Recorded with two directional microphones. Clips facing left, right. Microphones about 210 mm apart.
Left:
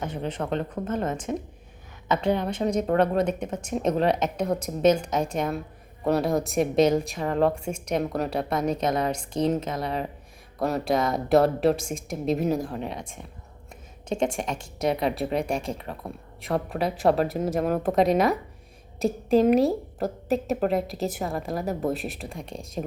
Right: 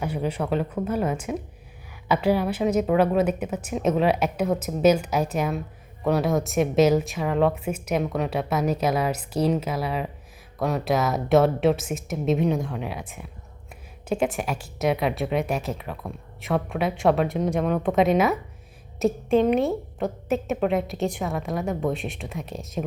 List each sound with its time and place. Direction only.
0.0 s a woman's voice: 10° right (ahead or behind)